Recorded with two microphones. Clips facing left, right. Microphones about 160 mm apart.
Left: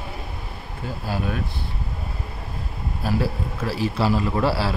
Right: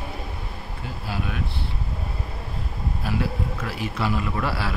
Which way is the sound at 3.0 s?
35° left (ahead or behind).